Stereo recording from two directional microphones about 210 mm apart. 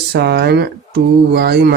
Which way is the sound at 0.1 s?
50° right (ahead or behind).